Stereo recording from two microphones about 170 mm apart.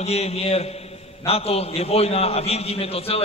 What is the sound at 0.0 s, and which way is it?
A man's voice, 40° left (ahead or behind).